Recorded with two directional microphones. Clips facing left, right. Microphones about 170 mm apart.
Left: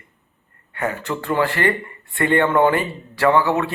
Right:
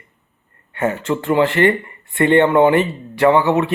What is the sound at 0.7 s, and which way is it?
Speech, 25° right (ahead or behind).